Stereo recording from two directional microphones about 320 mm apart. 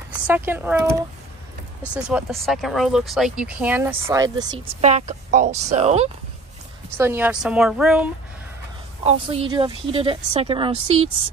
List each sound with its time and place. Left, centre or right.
0.3 s speech: centre
7.0 s speech: centre
9.0 s speech: centre